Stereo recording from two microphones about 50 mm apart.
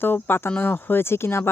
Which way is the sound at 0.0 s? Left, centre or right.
Left.